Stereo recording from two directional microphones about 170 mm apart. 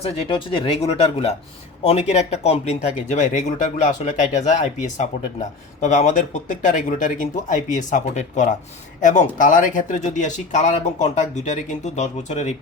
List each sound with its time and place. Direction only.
0.0 s speech: 35° left (ahead or behind)